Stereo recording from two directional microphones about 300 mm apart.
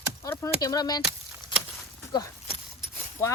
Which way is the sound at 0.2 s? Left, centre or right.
Centre.